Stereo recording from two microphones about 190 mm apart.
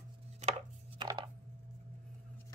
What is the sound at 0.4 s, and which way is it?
Chopping, 35° right (ahead or behind).